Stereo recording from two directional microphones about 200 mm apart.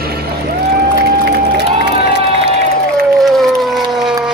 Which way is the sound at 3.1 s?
Centre (ahead or behind).